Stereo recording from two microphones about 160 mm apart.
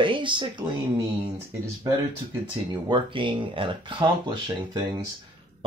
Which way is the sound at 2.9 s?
30° right (ahead or behind).